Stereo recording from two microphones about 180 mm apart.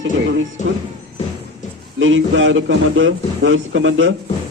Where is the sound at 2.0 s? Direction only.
90° right.